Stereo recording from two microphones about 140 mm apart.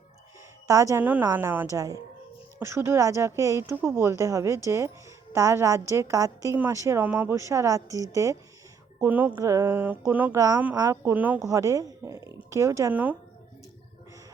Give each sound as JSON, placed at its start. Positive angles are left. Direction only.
{"t": 0.7, "sound": "a woman's voice", "side_deg": -20}
{"t": 9.0, "sound": "a woman's voice", "side_deg": -10}
{"t": 10.3, "sound": "a woman's voice", "side_deg": -25}
{"t": 11.3, "sound": "speech", "side_deg": -25}
{"t": 12.9, "sound": "speech", "side_deg": -10}